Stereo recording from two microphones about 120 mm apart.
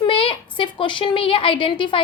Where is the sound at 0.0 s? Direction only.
45° left (ahead or behind).